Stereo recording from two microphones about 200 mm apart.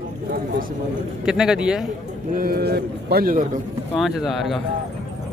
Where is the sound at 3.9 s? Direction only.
Centre (ahead or behind).